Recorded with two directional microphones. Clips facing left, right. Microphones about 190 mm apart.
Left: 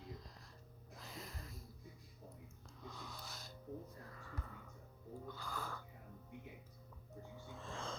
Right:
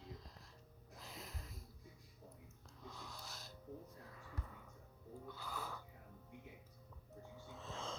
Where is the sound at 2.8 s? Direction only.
Centre (ahead or behind).